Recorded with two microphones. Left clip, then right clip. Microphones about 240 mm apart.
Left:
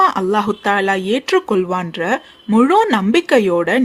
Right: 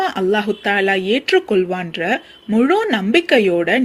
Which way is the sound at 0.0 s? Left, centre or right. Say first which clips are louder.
Left 3 dB; centre.